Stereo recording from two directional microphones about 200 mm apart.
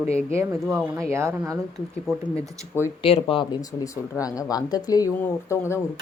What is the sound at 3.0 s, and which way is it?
Speech, 25° left (ahead or behind).